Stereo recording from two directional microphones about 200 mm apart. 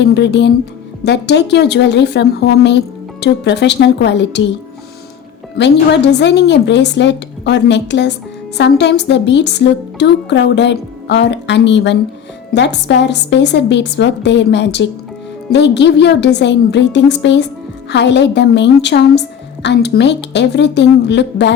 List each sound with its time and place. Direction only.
0.0 s a woman's voice: 60° left (ahead or behind)
5.6 s a woman's voice: 60° left (ahead or behind)